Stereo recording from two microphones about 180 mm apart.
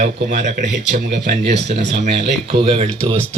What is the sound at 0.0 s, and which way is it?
Speech, 40° right (ahead or behind).